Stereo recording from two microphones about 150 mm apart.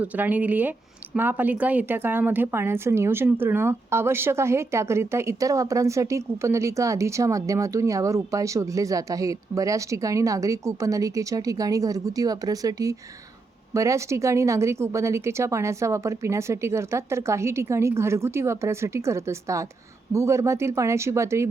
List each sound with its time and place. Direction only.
0.0 s speech: 10° right (ahead or behind)